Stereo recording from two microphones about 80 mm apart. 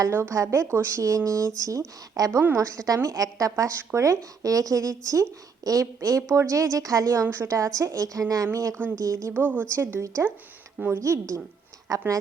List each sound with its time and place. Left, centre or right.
0.1 s speech: right
9.3 s speech: right
10.0 s speech: right